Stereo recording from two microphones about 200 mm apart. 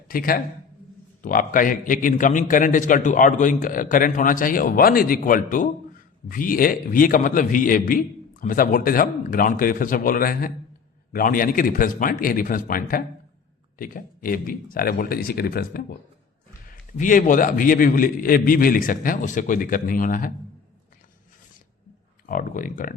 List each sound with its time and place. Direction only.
0.1 s a man's voice: 45° left (ahead or behind)
17.0 s a man's voice: 40° left (ahead or behind)
22.3 s a man's voice: 40° left (ahead or behind)